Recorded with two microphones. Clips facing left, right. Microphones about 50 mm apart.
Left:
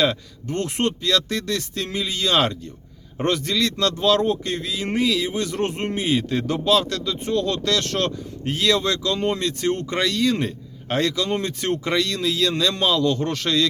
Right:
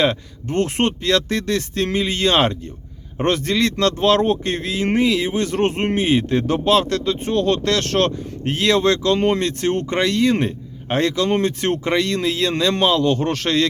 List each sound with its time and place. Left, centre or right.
0.0 s speech: right
11.6 s speech: right